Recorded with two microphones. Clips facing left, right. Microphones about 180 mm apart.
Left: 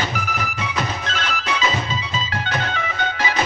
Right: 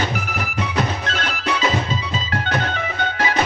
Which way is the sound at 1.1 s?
55° right (ahead or behind).